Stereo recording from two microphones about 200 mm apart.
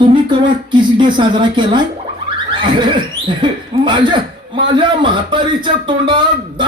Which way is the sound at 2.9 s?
25° right (ahead or behind).